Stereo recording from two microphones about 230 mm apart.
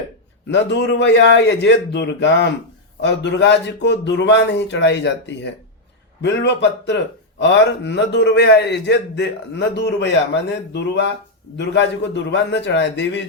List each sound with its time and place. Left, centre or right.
0.5 s speech: left